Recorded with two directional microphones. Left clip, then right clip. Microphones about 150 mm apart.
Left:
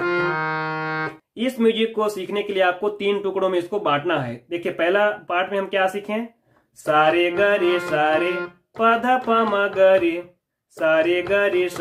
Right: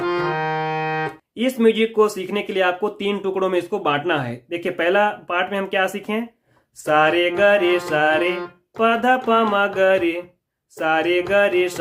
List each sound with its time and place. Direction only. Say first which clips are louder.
0.0 s music: even; 15° right (ahead or behind)
1.4 s speech: right 3 dB; 35° right (ahead or behind)